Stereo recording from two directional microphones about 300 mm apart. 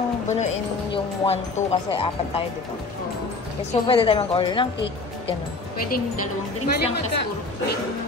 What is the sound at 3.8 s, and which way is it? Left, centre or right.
Speech, centre.